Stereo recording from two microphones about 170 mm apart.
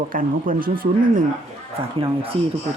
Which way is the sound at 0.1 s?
55° right (ahead or behind).